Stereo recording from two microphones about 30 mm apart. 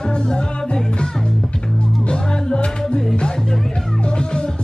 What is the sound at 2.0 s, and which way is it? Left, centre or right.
Music, left.